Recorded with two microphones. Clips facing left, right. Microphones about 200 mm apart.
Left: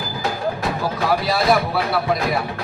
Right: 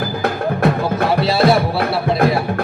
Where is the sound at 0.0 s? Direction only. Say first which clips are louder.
Right 4 dB; 60° right (ahead or behind).